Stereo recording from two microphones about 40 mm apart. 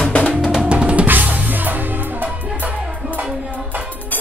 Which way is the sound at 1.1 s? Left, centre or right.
Right.